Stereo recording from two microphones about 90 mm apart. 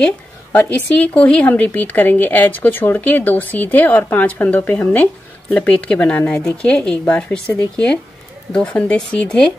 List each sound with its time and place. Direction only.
0.0 s a woman's voice: 20° left (ahead or behind)